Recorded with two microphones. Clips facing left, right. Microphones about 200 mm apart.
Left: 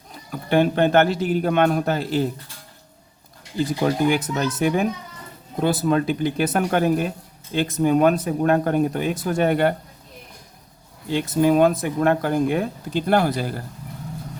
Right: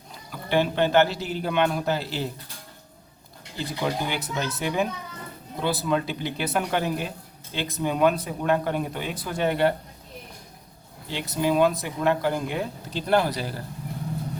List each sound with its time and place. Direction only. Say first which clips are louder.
0.3 s speech: left 5 dB; 50° left (ahead or behind)
3.8 s speech: left 7 dB; 50° left (ahead or behind)
11.1 s speech: left 6 dB; 50° left (ahead or behind)